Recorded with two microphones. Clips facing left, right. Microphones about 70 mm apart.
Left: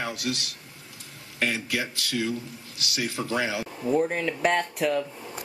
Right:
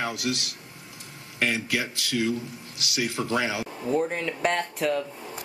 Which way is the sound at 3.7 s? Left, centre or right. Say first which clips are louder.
Left 3 dB; centre.